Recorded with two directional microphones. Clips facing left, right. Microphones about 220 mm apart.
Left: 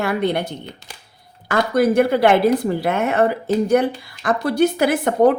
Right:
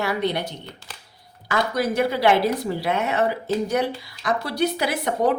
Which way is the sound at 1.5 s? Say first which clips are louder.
Left 6 dB; 55° left (ahead or behind).